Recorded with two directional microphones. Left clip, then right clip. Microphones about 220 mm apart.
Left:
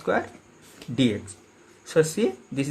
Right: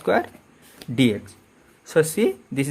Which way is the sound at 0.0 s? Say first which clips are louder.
Right 4 dB; 30° right (ahead or behind).